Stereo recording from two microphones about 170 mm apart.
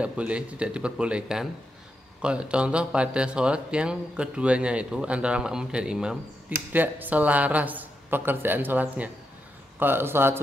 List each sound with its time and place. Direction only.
0.0 s speech: 5° right (ahead or behind)